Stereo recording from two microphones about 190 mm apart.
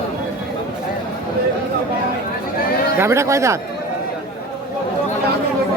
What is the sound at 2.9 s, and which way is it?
Speech, 15° right (ahead or behind).